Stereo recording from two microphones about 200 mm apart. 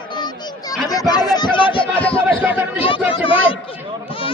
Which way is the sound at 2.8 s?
25° left (ahead or behind).